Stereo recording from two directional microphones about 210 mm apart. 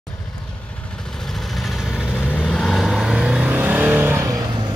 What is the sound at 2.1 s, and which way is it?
Vehicle, 10° left (ahead or behind).